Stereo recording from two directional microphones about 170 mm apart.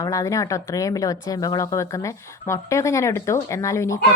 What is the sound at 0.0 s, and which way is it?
Speech, 20° left (ahead or behind).